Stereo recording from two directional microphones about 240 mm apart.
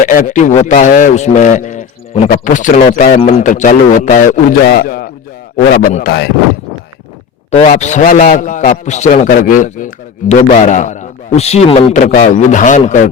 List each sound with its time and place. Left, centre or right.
0.1 s a man's voice: left
7.5 s a man's voice: left